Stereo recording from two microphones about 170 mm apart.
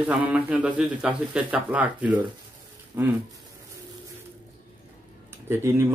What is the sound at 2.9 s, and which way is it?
Speech, 15° right (ahead or behind).